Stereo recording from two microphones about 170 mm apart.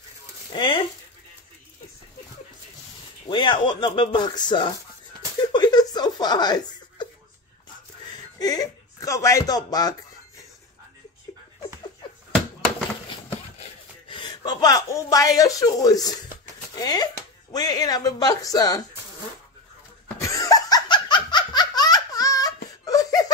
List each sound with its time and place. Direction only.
0.5 s speech: 30° left (ahead or behind)
3.3 s speech: 30° left (ahead or behind)
5.5 s a sound: 25° left (ahead or behind)
8.4 s speech: 20° left (ahead or behind)
13.6 s a sound: 30° left (ahead or behind)
16.7 s speech: 20° left (ahead or behind)
20.2 s laughter: 20° left (ahead or behind)